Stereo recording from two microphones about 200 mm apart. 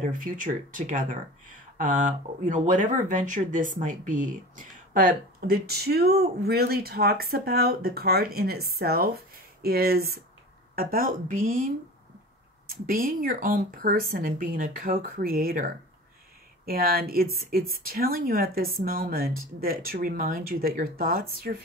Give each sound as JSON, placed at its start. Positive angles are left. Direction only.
{"t": 0.0, "sound": "speech", "side_deg": -40}
{"t": 12.6, "sound": "speech", "side_deg": -45}